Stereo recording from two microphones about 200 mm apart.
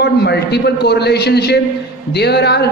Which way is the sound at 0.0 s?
55° left (ahead or behind).